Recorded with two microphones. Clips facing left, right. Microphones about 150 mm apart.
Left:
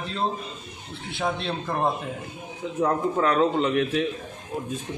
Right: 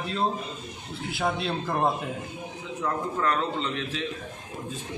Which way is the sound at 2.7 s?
45° left (ahead or behind).